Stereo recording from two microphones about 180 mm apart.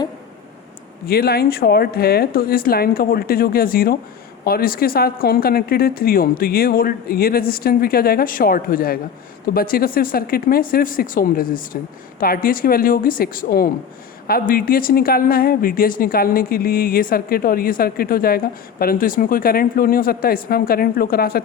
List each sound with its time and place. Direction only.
1.0 s a woman's voice: 60° left (ahead or behind)